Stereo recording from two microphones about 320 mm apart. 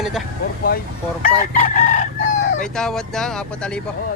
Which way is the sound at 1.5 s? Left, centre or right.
Left.